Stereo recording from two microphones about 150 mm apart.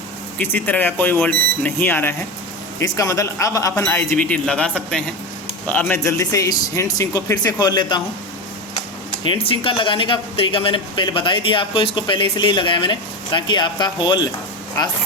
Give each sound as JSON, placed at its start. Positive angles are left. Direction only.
{"t": 0.3, "sound": "a man's voice", "side_deg": 10}
{"t": 9.2, "sound": "speech", "side_deg": 35}